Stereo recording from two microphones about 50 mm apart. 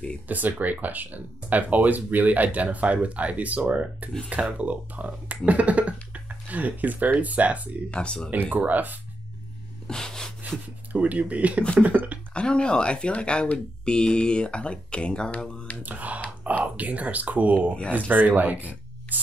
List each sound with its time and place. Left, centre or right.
0.3 s speech: right
7.9 s speech: centre
8.3 s speech: right
9.8 s a sound: centre
10.9 s speech: right
12.4 s speech: centre
15.8 s speech: right